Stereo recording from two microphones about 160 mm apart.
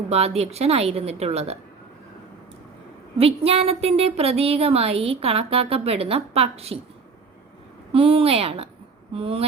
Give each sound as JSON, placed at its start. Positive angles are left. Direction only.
{"t": 0.1, "sound": "a woman's voice", "side_deg": -40}
{"t": 3.2, "sound": "a woman's voice", "side_deg": -40}
{"t": 7.9, "sound": "a woman's voice", "side_deg": -35}